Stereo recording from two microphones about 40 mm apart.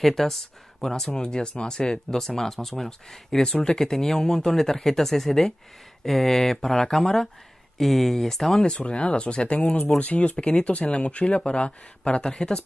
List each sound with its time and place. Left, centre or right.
0.0 s speech: centre
1.2 s speech: centre
2.1 s speech: centre
8.7 s speech: left
12.2 s speech: centre